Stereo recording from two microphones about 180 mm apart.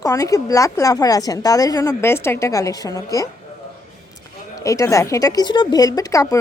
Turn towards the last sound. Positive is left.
turn(degrees=15)  # may be behind; listen again after turning